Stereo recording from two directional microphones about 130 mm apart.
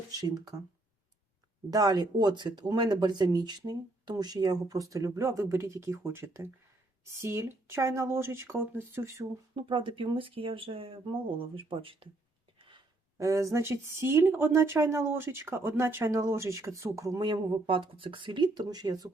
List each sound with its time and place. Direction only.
0.1 s speech: 30° right (ahead or behind)
1.7 s speech: 30° right (ahead or behind)
9.6 s speech: 40° right (ahead or behind)
12.5 s a sound: 40° right (ahead or behind)
13.1 s speech: 25° right (ahead or behind)
17.2 s speech: 35° right (ahead or behind)